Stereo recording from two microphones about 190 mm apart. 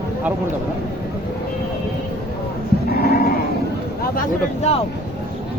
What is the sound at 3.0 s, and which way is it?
Sheep, 55° left (ahead or behind).